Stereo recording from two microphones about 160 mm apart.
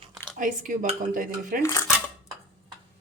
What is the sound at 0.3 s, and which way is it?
Speech, 55° right (ahead or behind).